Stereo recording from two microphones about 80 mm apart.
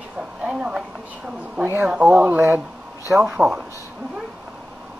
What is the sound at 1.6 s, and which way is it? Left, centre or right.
Speech, right.